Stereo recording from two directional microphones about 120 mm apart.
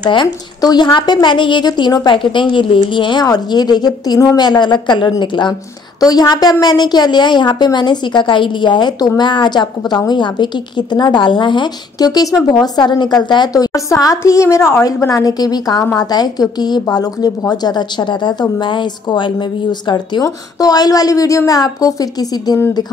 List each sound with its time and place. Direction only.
0.0 s a woman's voice: 40° left (ahead or behind)